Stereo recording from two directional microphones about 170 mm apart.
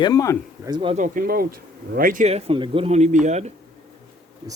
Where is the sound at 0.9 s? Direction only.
50° right (ahead or behind).